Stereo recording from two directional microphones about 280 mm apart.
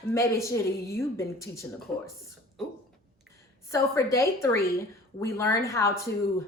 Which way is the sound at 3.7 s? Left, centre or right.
Centre.